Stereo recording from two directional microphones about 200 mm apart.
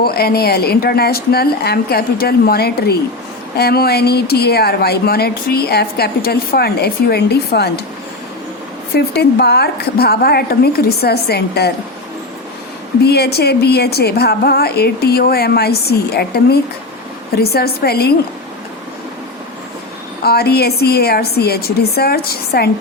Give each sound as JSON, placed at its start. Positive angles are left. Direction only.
{"t": 0.0, "sound": "speech", "side_deg": 50}
{"t": 9.0, "sound": "speech", "side_deg": 55}
{"t": 13.0, "sound": "speech", "side_deg": 55}
{"t": 20.2, "sound": "speech", "side_deg": 50}